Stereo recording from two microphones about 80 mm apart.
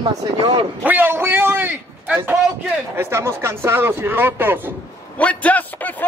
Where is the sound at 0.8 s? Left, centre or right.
Right.